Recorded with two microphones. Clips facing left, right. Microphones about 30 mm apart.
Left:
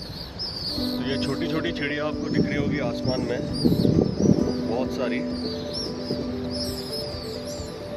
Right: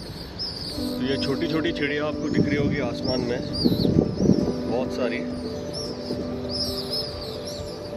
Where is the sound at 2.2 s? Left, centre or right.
Left.